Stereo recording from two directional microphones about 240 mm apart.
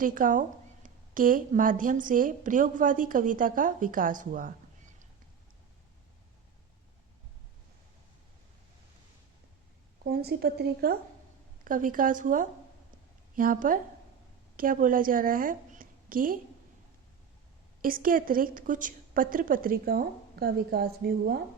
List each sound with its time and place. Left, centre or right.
0.0 s a woman's voice: right
10.0 s a woman's voice: right
17.8 s a woman's voice: right